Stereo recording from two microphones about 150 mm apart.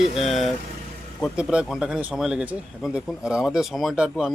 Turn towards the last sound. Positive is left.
turn(degrees=-5)  # may be behind; listen again after turning